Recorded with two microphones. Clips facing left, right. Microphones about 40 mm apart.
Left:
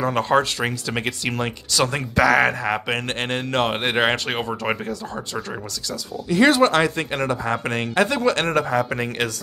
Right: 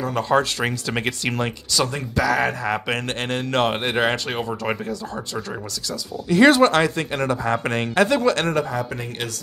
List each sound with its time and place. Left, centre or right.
0.0 s speech: left
0.6 s speech: centre
1.8 s speech: left
2.6 s speech: centre
3.4 s speech: centre
3.8 s speech: left
6.2 s speech: centre
6.5 s speech: centre
6.8 s speech: centre
7.4 s speech: centre
7.9 s speech: centre
8.3 s speech: left
8.5 s speech: left
8.9 s speech: left